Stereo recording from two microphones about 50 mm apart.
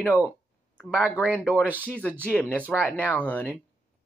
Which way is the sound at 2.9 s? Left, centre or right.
Left.